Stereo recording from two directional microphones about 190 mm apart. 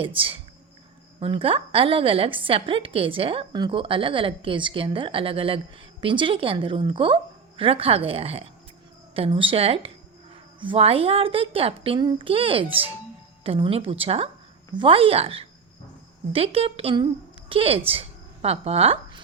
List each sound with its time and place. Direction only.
0.0 s a woman's voice: 30° right (ahead or behind)